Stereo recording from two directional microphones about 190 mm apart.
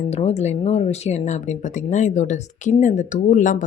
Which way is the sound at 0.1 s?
35° left (ahead or behind).